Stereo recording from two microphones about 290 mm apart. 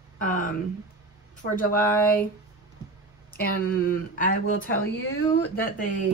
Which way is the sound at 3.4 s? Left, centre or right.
Left.